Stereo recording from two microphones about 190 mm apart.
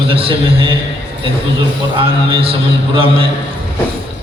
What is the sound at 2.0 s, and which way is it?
A man's voice, 30° right (ahead or behind).